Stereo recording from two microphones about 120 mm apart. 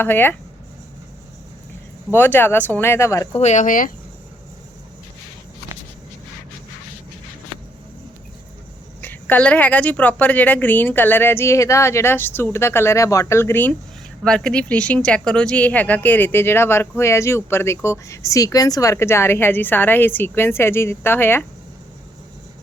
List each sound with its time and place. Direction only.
0.0 s a woman's voice: 15° left (ahead or behind)
2.1 s speech: 15° left (ahead or behind)
3.3 s speech: 75° left (ahead or behind)
9.0 s a woman's voice: 15° left (ahead or behind)
14.3 s a woman's voice: 5° left (ahead or behind)